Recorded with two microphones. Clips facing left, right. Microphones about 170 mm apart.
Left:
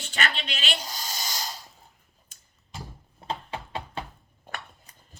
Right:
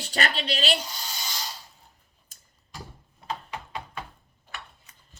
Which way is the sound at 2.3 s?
40° right (ahead or behind).